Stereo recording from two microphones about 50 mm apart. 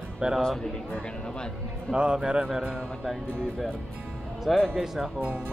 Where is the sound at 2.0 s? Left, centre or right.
Centre.